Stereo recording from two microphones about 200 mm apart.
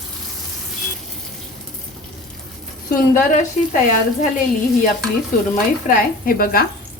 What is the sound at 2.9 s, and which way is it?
Speech, 45° left (ahead or behind).